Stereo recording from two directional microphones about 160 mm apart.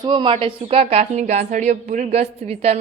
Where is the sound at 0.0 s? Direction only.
30° right (ahead or behind).